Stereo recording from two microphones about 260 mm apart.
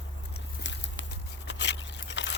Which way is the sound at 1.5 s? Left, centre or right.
Left.